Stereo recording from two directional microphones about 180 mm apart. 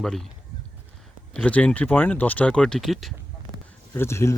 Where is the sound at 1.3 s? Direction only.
5° left (ahead or behind).